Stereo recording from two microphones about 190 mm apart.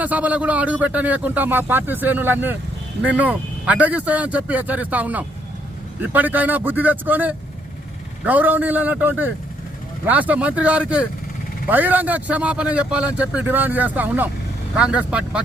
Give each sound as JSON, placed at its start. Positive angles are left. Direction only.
{"t": 0.0, "sound": "speech", "side_deg": -10}